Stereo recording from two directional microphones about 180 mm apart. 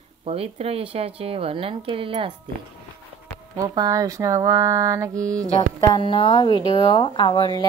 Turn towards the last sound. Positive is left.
turn(degrees=25)  # may be behind; listen again after turning